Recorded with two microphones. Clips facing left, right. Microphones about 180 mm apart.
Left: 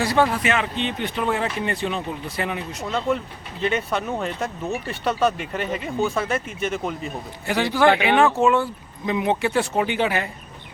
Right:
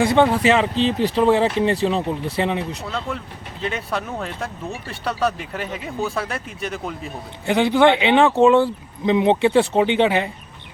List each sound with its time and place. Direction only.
0.0 s speech: 20° right (ahead or behind)
3.1 s speech: centre (ahead or behind)
7.4 s speech: 20° right (ahead or behind)